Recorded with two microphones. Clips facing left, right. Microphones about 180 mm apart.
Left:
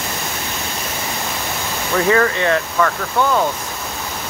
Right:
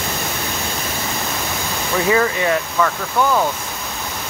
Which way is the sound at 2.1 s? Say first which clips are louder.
Even; 15° right (ahead or behind).